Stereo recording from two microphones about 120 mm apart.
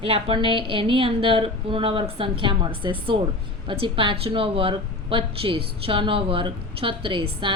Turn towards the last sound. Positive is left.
turn(degrees=-45)  # may be behind; listen again after turning